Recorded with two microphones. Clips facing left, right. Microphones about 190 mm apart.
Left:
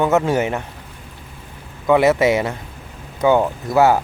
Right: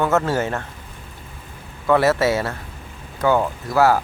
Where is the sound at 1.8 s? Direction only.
15° left (ahead or behind).